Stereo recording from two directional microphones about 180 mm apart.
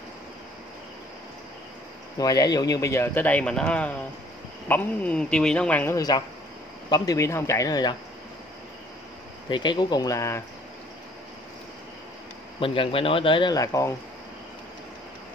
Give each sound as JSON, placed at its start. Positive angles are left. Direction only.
{"t": 2.1, "sound": "speech", "side_deg": 20}
{"t": 5.9, "sound": "speech", "side_deg": 20}
{"t": 9.5, "sound": "speech", "side_deg": 25}
{"t": 12.5, "sound": "speech", "side_deg": 30}